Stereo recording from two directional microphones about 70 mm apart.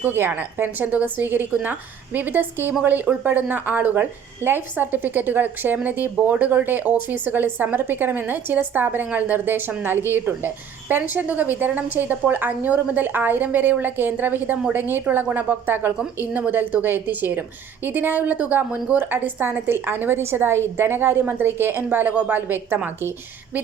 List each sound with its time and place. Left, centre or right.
0.0 s a woman's voice: right